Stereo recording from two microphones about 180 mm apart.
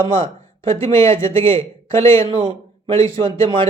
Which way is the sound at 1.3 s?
30° right (ahead or behind).